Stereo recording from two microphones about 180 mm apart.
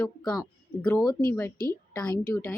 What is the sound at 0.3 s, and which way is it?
Speech, 5° left (ahead or behind).